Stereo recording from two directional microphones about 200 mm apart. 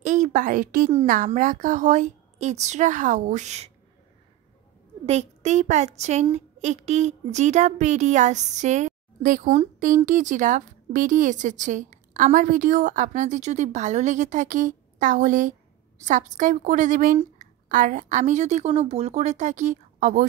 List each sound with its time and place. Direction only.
0.0 s a woman's voice: 40° right (ahead or behind)
5.0 s a woman's voice: 35° right (ahead or behind)